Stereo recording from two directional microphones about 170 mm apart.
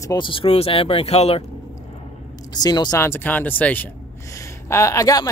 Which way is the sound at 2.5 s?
25° left (ahead or behind).